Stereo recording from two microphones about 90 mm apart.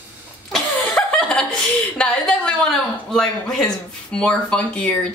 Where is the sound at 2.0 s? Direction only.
10° left (ahead or behind).